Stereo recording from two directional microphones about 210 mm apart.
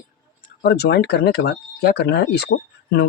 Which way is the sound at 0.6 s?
50° left (ahead or behind).